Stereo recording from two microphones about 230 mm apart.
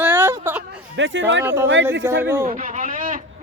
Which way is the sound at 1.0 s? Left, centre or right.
Right.